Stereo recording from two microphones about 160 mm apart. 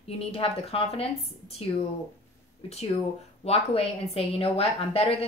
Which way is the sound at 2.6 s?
40° left (ahead or behind).